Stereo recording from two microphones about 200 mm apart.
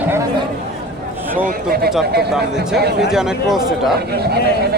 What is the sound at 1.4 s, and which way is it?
Speech, 50° right (ahead or behind).